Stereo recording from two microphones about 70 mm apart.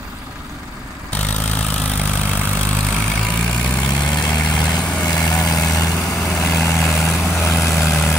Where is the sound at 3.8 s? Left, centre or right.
Left.